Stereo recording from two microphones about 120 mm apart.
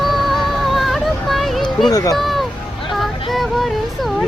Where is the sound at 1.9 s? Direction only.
30° left (ahead or behind).